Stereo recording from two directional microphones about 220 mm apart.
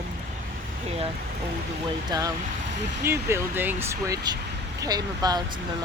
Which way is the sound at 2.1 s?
15° right (ahead or behind).